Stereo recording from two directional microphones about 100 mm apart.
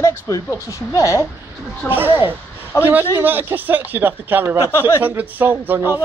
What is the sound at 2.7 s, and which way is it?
Speech, 30° left (ahead or behind).